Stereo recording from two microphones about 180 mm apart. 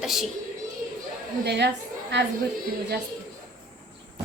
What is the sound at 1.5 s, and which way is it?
Speech, 70° right (ahead or behind).